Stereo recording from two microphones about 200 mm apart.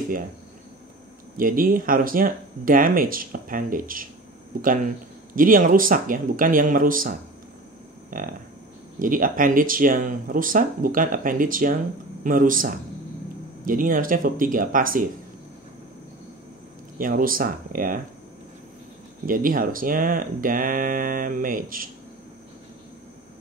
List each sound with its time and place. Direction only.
1.3 s speech: 45° right (ahead or behind)
8.1 s a sound: 40° right (ahead or behind)
9.0 s speech: 45° right (ahead or behind)
17.0 s speech: 45° right (ahead or behind)
19.2 s speech: 45° right (ahead or behind)